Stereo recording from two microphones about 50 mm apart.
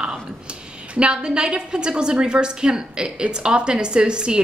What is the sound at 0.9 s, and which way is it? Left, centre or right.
A woman's voice, centre.